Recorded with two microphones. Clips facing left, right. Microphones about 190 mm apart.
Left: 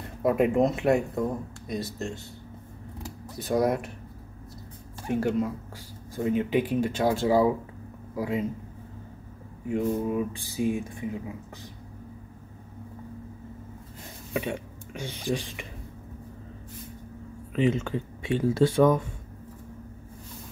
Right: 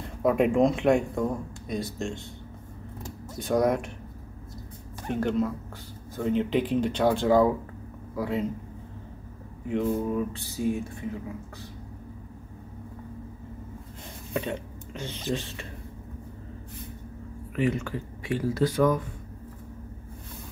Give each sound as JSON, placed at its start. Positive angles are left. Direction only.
{"t": 0.0, "sound": "speech", "side_deg": 0}
{"t": 3.0, "sound": "a sound", "side_deg": 5}
{"t": 5.0, "sound": "speech", "side_deg": 10}
{"t": 9.7, "sound": "speech", "side_deg": 5}
{"t": 14.4, "sound": "speech", "side_deg": 10}
{"t": 17.6, "sound": "speech", "side_deg": 25}